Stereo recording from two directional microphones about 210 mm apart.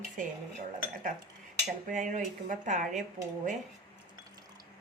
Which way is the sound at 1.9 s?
40° right (ahead or behind).